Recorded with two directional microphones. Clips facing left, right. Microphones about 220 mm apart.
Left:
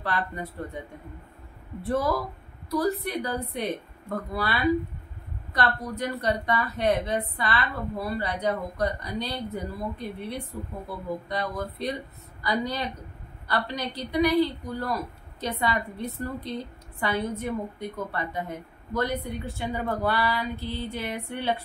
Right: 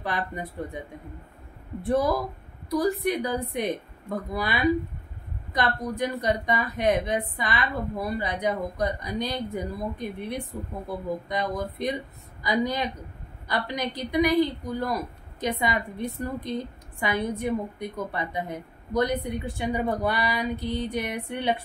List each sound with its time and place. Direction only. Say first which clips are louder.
0.0 s a woman's voice: even; 15° right (ahead or behind)
1.8 s a woman's voice: right 2 dB; 15° right (ahead or behind)